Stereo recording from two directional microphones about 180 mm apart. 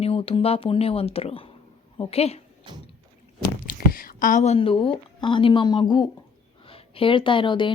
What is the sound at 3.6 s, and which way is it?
A woman's voice, 55° left (ahead or behind).